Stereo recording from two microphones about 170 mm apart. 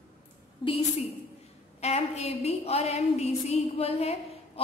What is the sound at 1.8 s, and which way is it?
A woman's voice, 40° left (ahead or behind).